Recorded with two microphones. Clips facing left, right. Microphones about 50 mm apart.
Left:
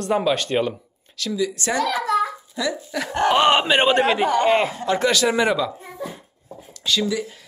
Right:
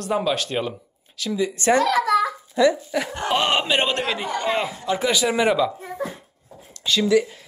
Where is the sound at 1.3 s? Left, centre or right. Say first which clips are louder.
Right 4 dB; right.